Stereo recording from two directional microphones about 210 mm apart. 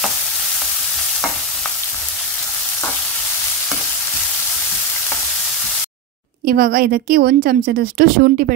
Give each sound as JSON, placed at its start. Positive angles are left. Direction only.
{"t": 6.4, "sound": "a woman's voice", "side_deg": -45}